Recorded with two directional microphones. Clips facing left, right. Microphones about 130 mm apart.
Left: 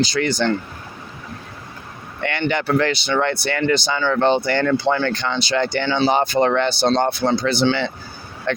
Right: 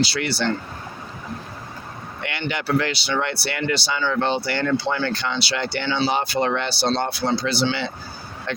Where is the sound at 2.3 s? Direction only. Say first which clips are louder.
Left 3 dB; 55° left (ahead or behind).